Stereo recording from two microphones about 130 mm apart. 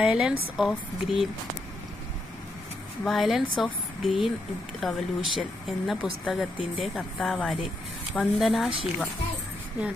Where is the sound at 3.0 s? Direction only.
Centre (ahead or behind).